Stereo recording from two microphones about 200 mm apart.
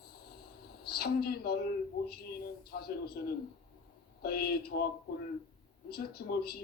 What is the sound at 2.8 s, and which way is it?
A man's voice, 50° left (ahead or behind).